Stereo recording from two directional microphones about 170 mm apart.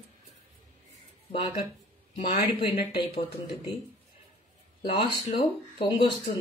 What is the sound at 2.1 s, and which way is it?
Speech, 35° left (ahead or behind).